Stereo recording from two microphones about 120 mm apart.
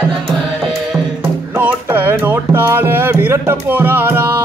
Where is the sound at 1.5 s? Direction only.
15° right (ahead or behind).